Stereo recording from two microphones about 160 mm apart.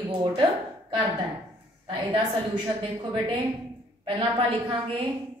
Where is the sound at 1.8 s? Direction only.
30° right (ahead or behind).